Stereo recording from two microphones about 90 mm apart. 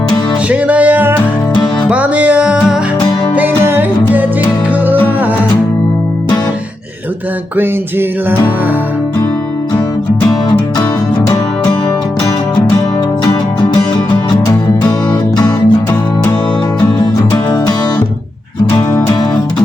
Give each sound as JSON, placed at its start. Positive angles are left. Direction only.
{"t": 0.5, "sound": "music", "side_deg": -15}
{"t": 3.3, "sound": "music", "side_deg": -25}
{"t": 7.5, "sound": "music", "side_deg": -20}
{"t": 14.3, "sound": "music", "side_deg": 40}